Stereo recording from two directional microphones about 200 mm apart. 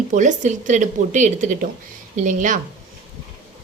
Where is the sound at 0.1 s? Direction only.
40° right (ahead or behind).